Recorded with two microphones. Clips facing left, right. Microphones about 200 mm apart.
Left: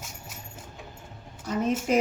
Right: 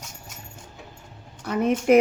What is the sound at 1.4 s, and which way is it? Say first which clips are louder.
Speech: right 5 dB; 60° right (ahead or behind).